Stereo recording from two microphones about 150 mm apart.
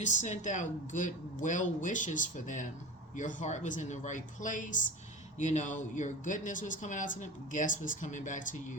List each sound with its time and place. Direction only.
0.0 s speech: 55° left (ahead or behind)